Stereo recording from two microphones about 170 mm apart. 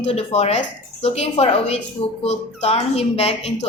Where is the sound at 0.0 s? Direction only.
40° left (ahead or behind).